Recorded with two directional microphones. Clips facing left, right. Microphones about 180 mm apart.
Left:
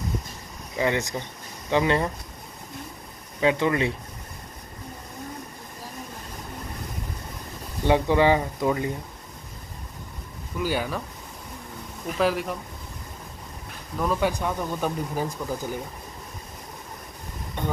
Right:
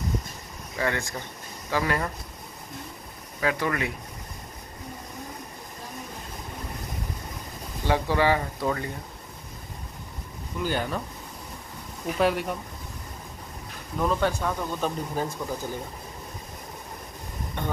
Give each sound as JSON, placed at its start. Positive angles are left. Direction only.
{"t": 0.7, "sound": "speech", "side_deg": 20}
{"t": 3.3, "sound": "speech", "side_deg": 25}
{"t": 7.8, "sound": "speech", "side_deg": 20}
{"t": 10.6, "sound": "speech", "side_deg": 5}
{"t": 12.2, "sound": "speech", "side_deg": 0}
{"t": 13.9, "sound": "speech", "side_deg": 5}
{"t": 14.3, "sound": "speech", "side_deg": 15}